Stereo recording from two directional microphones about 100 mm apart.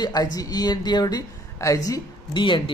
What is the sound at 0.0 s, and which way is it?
A man's voice, 40° left (ahead or behind).